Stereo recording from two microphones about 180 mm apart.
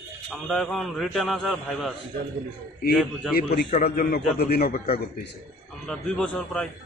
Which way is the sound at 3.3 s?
55° left (ahead or behind).